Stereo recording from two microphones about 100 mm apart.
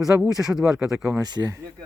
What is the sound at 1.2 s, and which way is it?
Speech, 40° right (ahead or behind).